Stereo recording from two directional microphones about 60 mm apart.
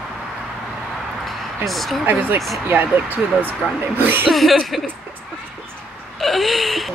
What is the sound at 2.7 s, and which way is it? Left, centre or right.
Speech, right.